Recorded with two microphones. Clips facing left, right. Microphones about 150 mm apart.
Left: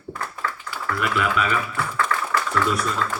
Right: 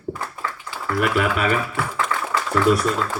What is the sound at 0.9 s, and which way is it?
Speech, 45° right (ahead or behind).